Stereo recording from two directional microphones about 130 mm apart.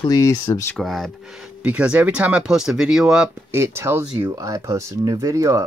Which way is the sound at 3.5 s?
20° right (ahead or behind).